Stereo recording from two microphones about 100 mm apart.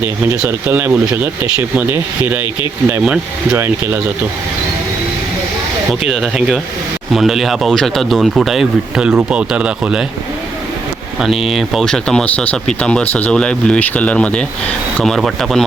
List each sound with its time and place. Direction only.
0.0 s speech: 20° right (ahead or behind)
3.0 s speech: 10° right (ahead or behind)
3.6 s speech: 20° right (ahead or behind)
5.9 s speech: centre (ahead or behind)
11.4 s speech: centre (ahead or behind)